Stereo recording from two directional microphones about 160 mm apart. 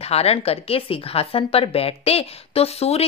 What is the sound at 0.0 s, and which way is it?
Speech, 40° left (ahead or behind).